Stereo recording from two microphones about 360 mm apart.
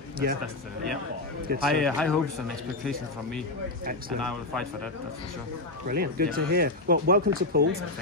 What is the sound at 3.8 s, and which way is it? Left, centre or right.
Speech, right.